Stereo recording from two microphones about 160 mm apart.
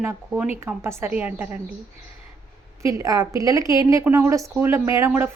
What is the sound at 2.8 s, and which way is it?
Speech, 20° right (ahead or behind).